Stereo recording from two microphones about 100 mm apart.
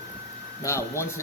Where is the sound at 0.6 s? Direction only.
25° left (ahead or behind).